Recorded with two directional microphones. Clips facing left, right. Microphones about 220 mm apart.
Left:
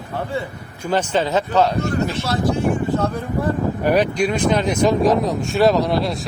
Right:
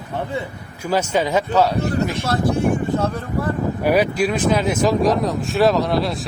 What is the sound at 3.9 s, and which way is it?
Speech, 5° right (ahead or behind).